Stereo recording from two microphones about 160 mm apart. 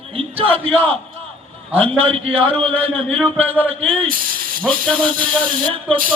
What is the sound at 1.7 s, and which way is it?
Speech, 40° right (ahead or behind).